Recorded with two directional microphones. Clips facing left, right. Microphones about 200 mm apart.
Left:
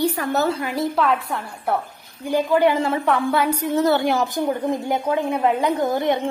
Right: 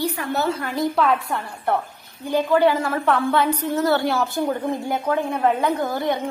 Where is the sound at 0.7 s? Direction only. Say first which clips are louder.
Right 2 dB; centre (ahead or behind).